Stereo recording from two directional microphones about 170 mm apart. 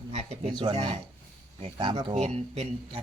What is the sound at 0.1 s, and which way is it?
Speech, 40° right (ahead or behind).